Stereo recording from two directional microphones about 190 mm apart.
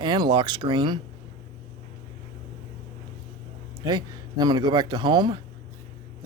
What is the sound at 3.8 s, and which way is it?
Speech, 20° right (ahead or behind).